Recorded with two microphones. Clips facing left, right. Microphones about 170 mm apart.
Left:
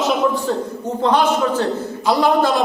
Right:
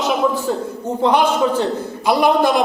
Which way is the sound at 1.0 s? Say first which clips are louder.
Right 1 dB; 15° right (ahead or behind).